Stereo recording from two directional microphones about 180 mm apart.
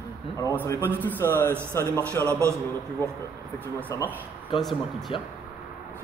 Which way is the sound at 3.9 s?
20° left (ahead or behind).